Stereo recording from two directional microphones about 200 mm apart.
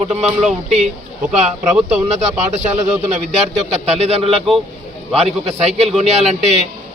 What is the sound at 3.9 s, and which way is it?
Speech, 30° right (ahead or behind).